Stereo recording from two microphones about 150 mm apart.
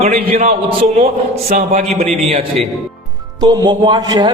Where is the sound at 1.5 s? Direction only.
55° right (ahead or behind).